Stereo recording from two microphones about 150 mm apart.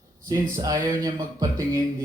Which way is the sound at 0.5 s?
25° right (ahead or behind).